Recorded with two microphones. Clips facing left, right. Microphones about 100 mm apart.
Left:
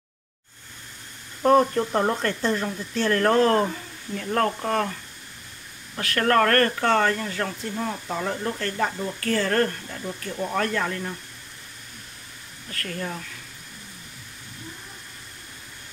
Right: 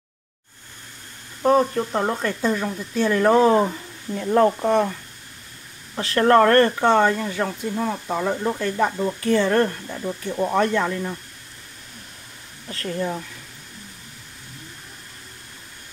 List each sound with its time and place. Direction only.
1.4 s speech: centre (ahead or behind)
4.1 s speech: 20° right (ahead or behind)
5.9 s speech: 25° right (ahead or behind)
12.6 s speech: 25° right (ahead or behind)